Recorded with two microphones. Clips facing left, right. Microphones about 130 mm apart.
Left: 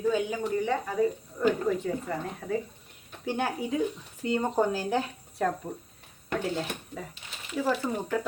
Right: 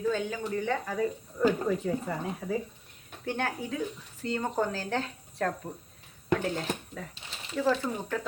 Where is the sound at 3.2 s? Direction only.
10° left (ahead or behind).